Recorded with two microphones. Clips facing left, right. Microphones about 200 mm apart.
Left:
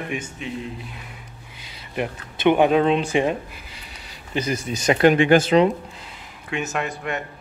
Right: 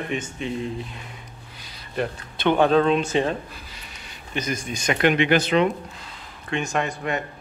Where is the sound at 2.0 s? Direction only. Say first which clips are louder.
Left 2 dB; 15° left (ahead or behind).